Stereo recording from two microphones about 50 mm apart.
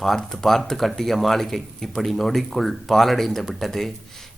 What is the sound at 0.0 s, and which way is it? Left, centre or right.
Speech, centre.